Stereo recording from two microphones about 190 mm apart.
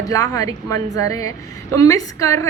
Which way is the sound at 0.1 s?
20° left (ahead or behind).